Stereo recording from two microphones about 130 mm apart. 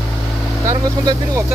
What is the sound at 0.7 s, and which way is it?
Speech, 25° right (ahead or behind).